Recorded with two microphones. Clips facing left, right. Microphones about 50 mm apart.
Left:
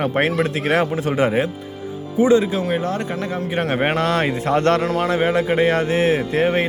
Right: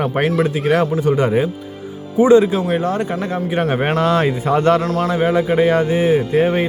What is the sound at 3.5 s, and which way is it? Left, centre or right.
A man's voice, centre.